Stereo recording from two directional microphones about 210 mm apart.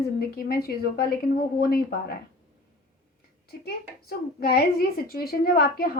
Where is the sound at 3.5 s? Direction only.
50° left (ahead or behind).